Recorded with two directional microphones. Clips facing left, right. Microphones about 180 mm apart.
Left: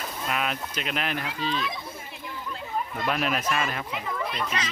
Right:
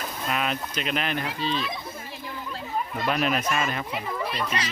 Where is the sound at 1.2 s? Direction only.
35° right (ahead or behind).